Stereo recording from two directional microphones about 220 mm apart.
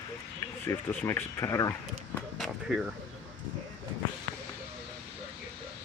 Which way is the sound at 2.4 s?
Centre (ahead or behind).